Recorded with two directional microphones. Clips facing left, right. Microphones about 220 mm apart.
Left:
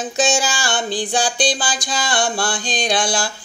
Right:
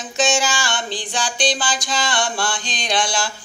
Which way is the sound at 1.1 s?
35° left (ahead or behind).